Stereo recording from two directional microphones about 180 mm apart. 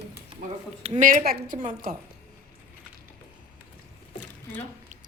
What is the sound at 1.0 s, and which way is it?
Speech, 45° right (ahead or behind).